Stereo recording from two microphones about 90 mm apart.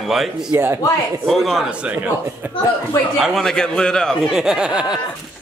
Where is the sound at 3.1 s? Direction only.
Centre (ahead or behind).